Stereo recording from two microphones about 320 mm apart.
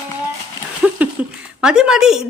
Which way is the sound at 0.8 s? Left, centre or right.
Centre.